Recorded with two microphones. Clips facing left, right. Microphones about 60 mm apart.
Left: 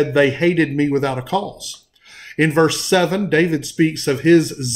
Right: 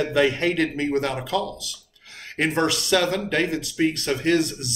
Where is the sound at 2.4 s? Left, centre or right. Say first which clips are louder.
Left 7 dB; left.